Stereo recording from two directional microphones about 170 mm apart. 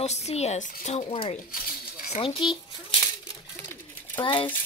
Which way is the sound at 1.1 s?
30° left (ahead or behind).